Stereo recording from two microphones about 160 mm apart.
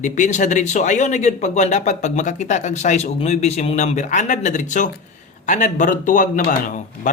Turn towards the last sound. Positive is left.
turn(degrees=50)  # may be behind; listen again after turning